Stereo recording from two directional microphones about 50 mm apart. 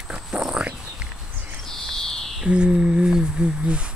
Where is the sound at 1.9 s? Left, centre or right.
Centre.